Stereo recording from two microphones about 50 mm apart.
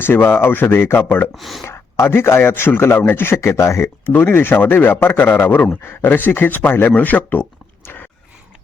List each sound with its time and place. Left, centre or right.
0.0 s a man's voice: left
1.4 s speech: centre
1.6 s a man's voice: left
3.3 s speech: left
4.0 s a man's voice: left
5.6 s speech: left
6.1 s a man's voice: left
6.9 s speech: left